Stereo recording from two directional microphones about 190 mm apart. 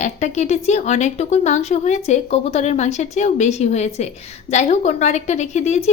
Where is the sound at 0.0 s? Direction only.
40° left (ahead or behind).